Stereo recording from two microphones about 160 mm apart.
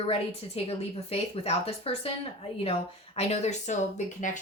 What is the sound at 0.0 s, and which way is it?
Speech, 40° left (ahead or behind).